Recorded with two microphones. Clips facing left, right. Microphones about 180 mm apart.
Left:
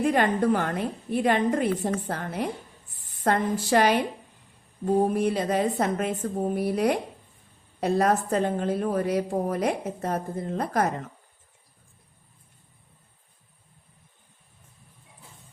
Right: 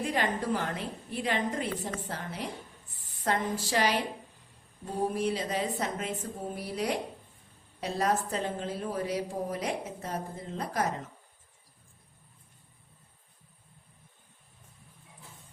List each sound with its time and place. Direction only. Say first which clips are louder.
0.0 s a woman's voice: left 8 dB; 55° left (ahead or behind)
5.1 s a woman's voice: left 6 dB; 55° left (ahead or behind)